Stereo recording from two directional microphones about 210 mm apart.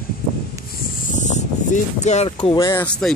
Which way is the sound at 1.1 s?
35° left (ahead or behind).